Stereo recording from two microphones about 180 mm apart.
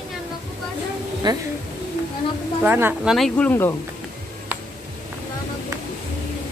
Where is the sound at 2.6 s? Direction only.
10° right (ahead or behind).